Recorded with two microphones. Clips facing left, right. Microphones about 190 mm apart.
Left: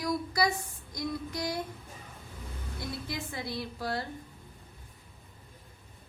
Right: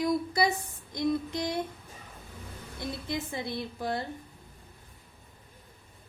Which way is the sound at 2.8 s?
20° right (ahead or behind).